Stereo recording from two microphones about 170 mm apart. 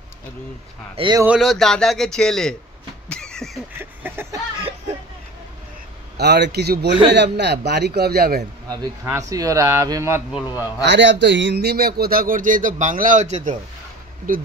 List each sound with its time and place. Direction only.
0.9 s speech: 25° right (ahead or behind)
1.2 s speech: 5° right (ahead or behind)
3.1 s a sound: 5° left (ahead or behind)
4.0 s a sound: 15° right (ahead or behind)
6.1 s a man's voice: 80° right
7.1 s a man's voice: 85° right; by 8.5 s 65° right (ahead or behind)
8.6 s speech: 20° right (ahead or behind)
10.8 s speech: 90° right; by 14.4 s 55° right (ahead or behind)